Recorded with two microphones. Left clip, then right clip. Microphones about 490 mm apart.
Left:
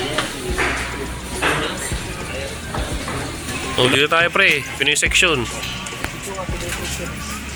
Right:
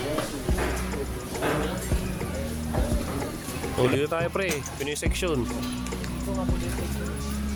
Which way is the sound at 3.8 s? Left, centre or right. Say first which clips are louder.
Left 10 dB; right.